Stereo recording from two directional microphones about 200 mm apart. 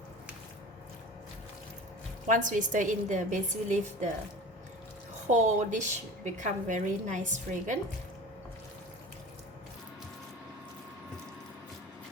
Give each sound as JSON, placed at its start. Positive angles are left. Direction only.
{"t": 2.2, "sound": "a woman's voice", "side_deg": -40}
{"t": 5.3, "sound": "a woman's voice", "side_deg": -35}